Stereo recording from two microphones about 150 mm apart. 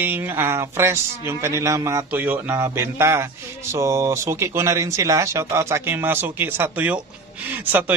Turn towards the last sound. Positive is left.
turn(degrees=-10)  # may be behind; listen again after turning